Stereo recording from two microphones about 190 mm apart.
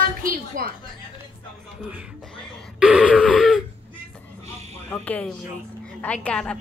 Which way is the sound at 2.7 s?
5° right (ahead or behind).